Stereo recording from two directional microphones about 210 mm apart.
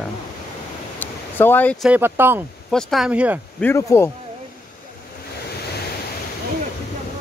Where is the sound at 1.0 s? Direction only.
10° left (ahead or behind).